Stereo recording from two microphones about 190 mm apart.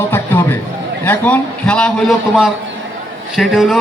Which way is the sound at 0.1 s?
10° left (ahead or behind).